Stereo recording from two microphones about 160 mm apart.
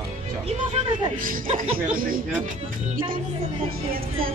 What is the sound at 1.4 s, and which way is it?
Speech, 35° right (ahead or behind).